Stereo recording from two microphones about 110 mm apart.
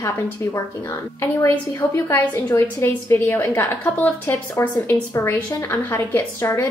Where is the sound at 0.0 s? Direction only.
25° left (ahead or behind).